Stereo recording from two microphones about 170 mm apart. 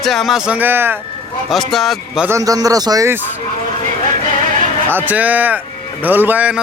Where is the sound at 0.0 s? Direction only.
Centre (ahead or behind).